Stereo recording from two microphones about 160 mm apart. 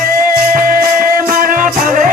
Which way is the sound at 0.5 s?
60° right (ahead or behind).